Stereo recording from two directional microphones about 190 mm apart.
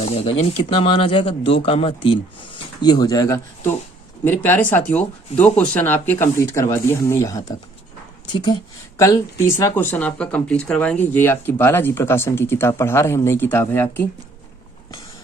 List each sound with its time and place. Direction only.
0.0 s speech: 30° left (ahead or behind); by 14.0 s 10° left (ahead or behind)